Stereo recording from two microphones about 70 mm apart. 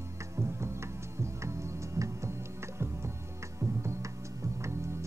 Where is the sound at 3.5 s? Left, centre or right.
Right.